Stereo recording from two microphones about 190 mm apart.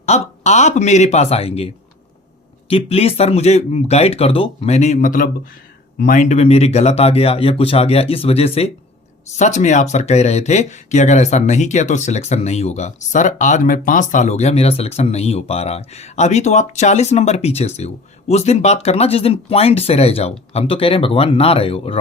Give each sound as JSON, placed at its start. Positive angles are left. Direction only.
{"t": 0.0, "sound": "speech", "side_deg": 35}